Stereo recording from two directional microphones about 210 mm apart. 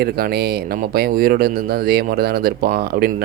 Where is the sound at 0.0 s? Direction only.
45° right (ahead or behind).